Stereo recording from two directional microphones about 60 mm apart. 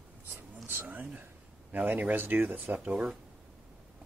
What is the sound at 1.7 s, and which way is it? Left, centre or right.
Speech, right.